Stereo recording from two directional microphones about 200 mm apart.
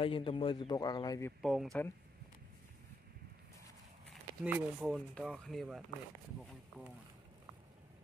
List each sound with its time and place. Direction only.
0.0 s a man's voice: 25° left (ahead or behind)
1.4 s speech: centre (ahead or behind)
4.1 s speech: 10° right (ahead or behind)